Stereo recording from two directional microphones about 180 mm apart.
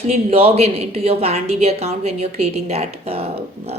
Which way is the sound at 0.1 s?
35° right (ahead or behind).